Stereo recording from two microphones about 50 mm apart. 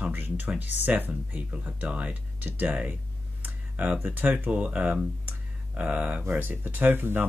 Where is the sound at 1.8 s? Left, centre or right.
Right.